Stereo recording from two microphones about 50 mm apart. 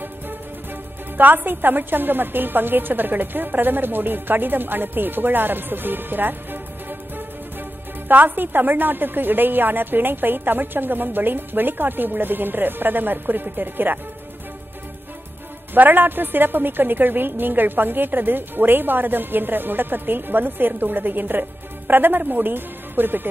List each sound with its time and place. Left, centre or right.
1.1 s a woman's voice: right
15.7 s a woman's voice: right